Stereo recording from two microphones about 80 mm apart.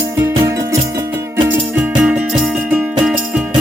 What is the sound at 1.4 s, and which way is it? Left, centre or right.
Music, right.